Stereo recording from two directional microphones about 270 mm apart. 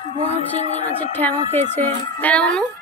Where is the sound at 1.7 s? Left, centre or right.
Centre.